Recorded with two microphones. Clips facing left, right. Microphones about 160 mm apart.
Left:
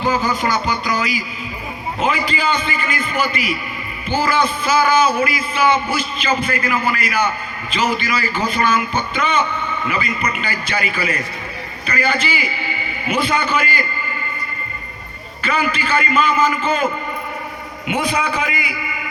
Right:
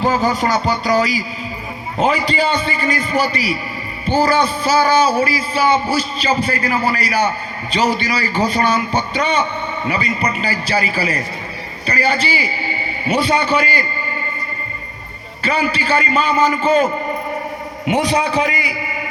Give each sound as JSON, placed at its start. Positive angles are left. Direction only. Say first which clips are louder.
{"t": 0.0, "sound": "a man's voice", "louder": "right 2 dB", "side_deg": -40}
{"t": 15.4, "sound": "a man's voice", "louder": "right 2 dB", "side_deg": -35}